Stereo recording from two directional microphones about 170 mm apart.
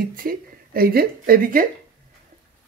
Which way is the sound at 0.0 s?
55° right (ahead or behind).